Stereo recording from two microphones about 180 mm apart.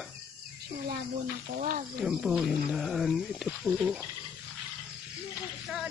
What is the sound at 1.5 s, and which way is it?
Speech, 50° right (ahead or behind).